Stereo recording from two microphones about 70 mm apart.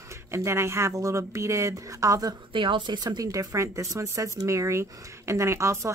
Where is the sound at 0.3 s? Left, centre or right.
Right.